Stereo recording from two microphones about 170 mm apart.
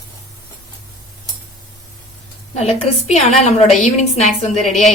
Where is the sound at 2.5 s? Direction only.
40° left (ahead or behind).